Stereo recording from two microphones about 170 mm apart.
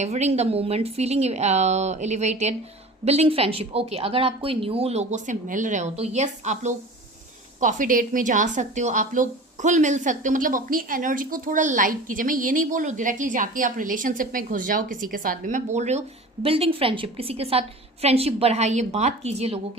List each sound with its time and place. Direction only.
0.0 s a woman's voice: 40° right (ahead or behind)